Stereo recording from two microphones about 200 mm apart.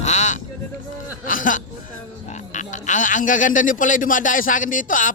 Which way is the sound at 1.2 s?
45° left (ahead or behind).